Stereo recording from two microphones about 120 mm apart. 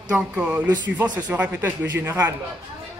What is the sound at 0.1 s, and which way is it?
Speech, 10° right (ahead or behind).